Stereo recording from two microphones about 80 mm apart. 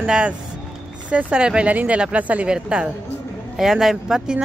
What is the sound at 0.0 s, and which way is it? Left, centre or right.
A woman's voice, centre.